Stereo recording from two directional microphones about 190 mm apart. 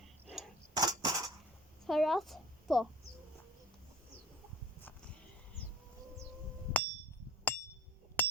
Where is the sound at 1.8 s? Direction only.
Centre (ahead or behind).